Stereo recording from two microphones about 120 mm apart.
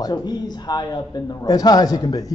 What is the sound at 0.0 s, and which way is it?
A man's voice, 35° left (ahead or behind).